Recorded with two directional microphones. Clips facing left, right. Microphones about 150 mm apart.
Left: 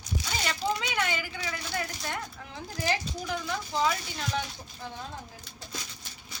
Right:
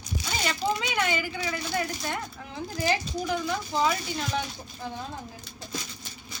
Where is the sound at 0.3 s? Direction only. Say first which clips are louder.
Right 3 dB; 15° right (ahead or behind).